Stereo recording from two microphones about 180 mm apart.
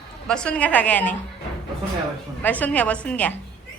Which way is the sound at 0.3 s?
5° left (ahead or behind).